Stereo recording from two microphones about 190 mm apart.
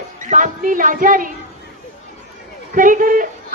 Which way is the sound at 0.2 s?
40° right (ahead or behind).